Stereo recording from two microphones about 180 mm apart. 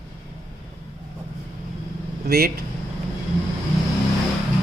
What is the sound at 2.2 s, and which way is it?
Speech, 60° right (ahead or behind).